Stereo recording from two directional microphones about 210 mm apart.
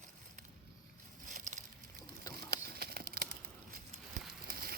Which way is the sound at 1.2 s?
40° right (ahead or behind).